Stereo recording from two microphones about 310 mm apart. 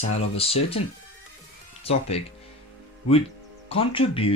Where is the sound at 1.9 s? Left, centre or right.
Centre.